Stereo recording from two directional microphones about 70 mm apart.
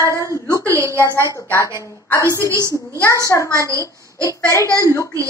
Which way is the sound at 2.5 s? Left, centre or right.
Right.